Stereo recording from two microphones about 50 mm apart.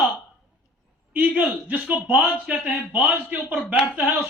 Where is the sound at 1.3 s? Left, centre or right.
Right.